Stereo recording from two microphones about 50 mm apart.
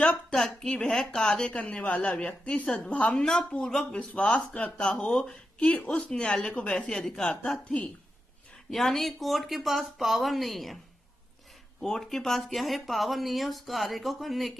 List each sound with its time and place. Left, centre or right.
0.3 s speech: centre
1.6 s speech: left; by 4.1 s centre
4.1 s speech: left
6.9 s speech: centre
7.6 s speech: left
8.6 s speech: centre
11.8 s speech: centre